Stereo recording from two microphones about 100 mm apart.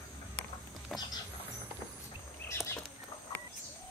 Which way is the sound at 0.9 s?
Centre (ahead or behind).